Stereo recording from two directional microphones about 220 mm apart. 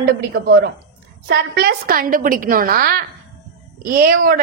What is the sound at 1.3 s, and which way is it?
A woman's voice, 45° right (ahead or behind).